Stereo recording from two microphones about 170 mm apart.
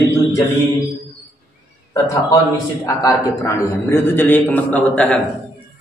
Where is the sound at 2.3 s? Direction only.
20° left (ahead or behind).